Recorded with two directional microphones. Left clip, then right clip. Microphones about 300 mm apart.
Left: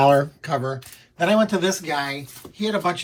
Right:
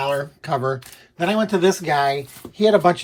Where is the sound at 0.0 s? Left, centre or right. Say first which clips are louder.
Left 6 dB; centre.